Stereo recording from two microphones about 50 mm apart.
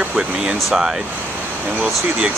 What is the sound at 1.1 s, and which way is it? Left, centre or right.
Speech, right.